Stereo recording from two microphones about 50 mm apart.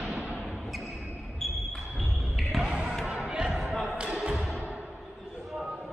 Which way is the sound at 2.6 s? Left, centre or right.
Centre.